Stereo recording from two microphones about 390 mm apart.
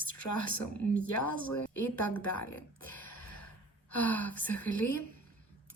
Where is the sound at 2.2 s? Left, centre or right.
Left.